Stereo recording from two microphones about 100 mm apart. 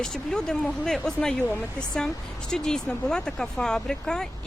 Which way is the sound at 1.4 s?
20° left (ahead or behind).